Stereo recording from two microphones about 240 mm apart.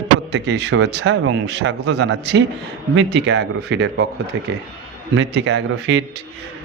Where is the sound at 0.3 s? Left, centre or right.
Right.